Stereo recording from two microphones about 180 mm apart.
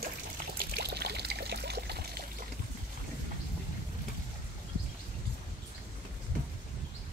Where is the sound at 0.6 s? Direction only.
60° right (ahead or behind).